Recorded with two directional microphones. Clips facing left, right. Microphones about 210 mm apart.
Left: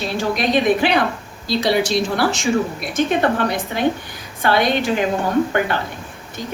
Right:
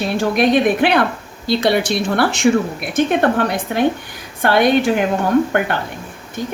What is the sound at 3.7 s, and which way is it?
A woman's voice, 55° right (ahead or behind).